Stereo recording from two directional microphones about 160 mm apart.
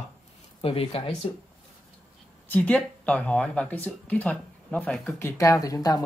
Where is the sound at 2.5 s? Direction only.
10° left (ahead or behind).